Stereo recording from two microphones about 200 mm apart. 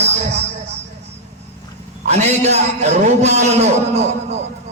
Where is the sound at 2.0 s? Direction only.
35° right (ahead or behind).